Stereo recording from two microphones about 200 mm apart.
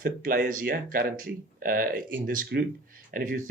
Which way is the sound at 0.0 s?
45° right (ahead or behind).